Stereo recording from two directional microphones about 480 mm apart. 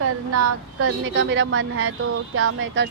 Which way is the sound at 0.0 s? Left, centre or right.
Right.